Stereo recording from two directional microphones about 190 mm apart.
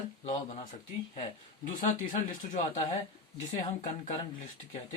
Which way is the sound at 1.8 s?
45° left (ahead or behind).